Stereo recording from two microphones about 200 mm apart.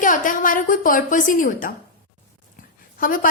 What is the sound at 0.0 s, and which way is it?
A woman's voice, 40° left (ahead or behind).